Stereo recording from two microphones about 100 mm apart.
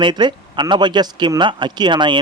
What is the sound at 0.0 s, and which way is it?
Speech, 50° right (ahead or behind).